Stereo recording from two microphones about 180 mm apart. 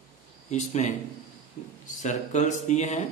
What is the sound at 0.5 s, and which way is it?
Speech, 40° left (ahead or behind).